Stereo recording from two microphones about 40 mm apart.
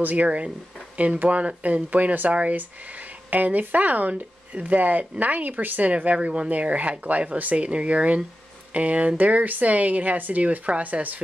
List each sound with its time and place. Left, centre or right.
0.0 s speech: right
0.9 s speech: right
6.1 s speech: right
6.5 s speech: right